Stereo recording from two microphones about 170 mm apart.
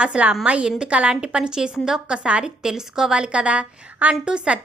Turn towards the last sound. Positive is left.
turn(degrees=-5)  # may be behind; listen again after turning